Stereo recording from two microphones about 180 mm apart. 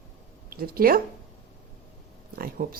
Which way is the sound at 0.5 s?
55° right (ahead or behind).